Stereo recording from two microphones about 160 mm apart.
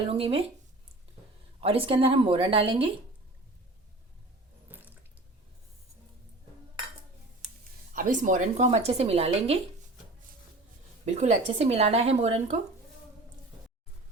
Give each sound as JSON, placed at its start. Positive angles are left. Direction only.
{"t": 0.1, "sound": "speech", "side_deg": -35}
{"t": 1.6, "sound": "speech", "side_deg": -35}
{"t": 4.7, "sound": "water", "side_deg": -10}
{"t": 7.9, "sound": "speech", "side_deg": -55}
{"t": 11.0, "sound": "speech", "side_deg": -45}